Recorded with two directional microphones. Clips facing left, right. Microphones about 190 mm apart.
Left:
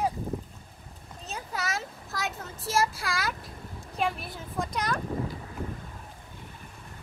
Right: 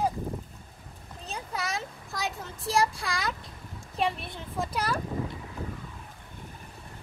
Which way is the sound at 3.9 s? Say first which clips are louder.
Right 1 dB; centre (ahead or behind).